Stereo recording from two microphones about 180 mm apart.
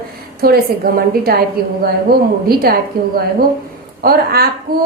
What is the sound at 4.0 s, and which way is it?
Speech, 55° right (ahead or behind).